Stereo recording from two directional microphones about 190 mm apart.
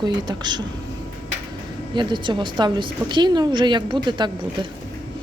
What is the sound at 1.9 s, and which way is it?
A woman's voice, 25° right (ahead or behind).